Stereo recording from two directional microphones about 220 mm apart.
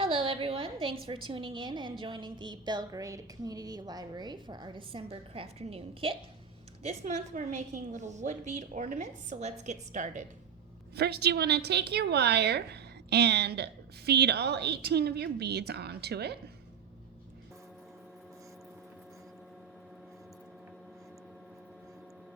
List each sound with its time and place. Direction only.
0.0 s a woman's voice: 25° right (ahead or behind)
10.9 s a woman's voice: 45° right (ahead or behind)